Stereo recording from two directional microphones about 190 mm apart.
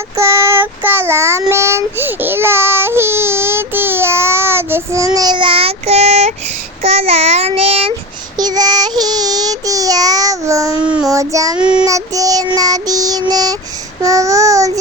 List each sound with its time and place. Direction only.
0.2 s child singing: 15° right (ahead or behind)
11.1 s child singing: 15° right (ahead or behind)
11.6 s child singing: 5° right (ahead or behind)
11.9 s child singing: 20° right (ahead or behind)